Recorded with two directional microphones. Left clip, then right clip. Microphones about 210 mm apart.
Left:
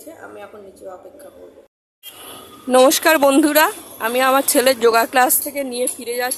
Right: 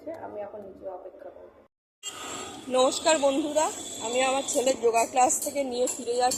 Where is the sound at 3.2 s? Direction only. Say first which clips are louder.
Left 11 dB; 50° left (ahead or behind).